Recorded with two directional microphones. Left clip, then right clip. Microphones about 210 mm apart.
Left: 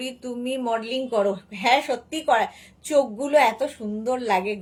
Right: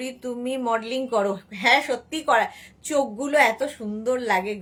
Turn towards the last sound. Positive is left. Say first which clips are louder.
# even
turn(degrees=-15)  # may be behind; listen again after turning